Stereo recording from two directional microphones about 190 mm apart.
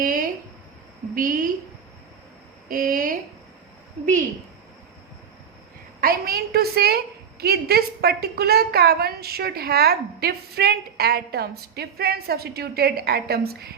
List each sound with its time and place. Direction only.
0.0 s a sound: 45° right (ahead or behind)
1.1 s a woman's voice: 50° right (ahead or behind)
2.6 s a woman's voice: 45° right (ahead or behind)
6.0 s a woman's voice: 50° right (ahead or behind)